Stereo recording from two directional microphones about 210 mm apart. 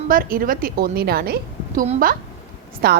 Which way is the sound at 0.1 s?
40° right (ahead or behind).